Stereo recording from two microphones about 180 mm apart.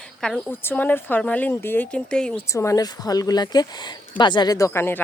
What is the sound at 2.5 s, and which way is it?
Speech, 15° left (ahead or behind).